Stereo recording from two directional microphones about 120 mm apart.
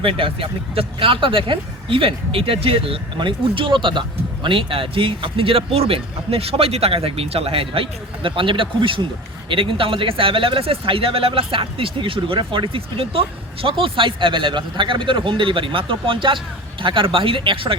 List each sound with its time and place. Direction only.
0.0 s speech: 50° right (ahead or behind)